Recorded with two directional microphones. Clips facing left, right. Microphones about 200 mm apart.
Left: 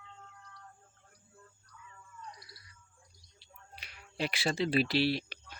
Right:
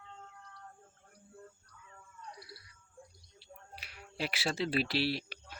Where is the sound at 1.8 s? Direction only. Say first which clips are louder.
Left 1 dB; 60° right (ahead or behind).